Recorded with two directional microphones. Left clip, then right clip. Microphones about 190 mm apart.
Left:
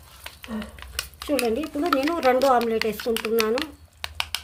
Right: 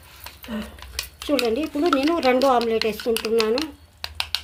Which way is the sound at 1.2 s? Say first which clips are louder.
Right 2 dB; 10° right (ahead or behind).